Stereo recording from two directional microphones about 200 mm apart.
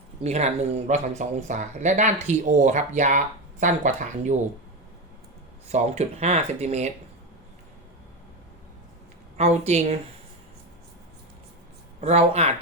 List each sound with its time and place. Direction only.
0.2 s speech: 35° right (ahead or behind)
5.6 s speech: 35° right (ahead or behind)
9.4 s speech: 35° right (ahead or behind)
11.9 s speech: 30° right (ahead or behind)